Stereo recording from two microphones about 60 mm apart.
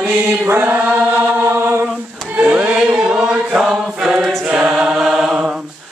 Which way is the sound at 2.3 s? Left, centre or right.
Right.